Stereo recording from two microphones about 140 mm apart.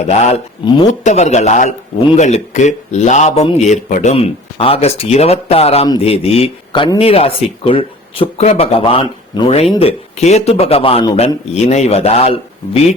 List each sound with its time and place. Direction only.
0.1 s a man's voice: 50° left (ahead or behind)